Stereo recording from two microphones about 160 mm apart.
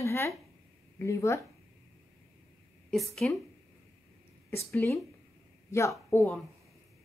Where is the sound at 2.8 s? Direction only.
Centre (ahead or behind).